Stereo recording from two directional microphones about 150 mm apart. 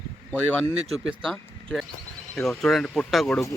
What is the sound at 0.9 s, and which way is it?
Speech, 5° left (ahead or behind).